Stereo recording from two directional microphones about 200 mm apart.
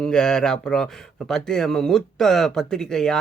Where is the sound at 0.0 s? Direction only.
5° left (ahead or behind).